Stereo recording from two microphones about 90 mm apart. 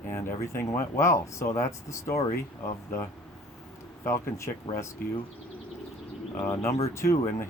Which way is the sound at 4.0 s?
30° left (ahead or behind).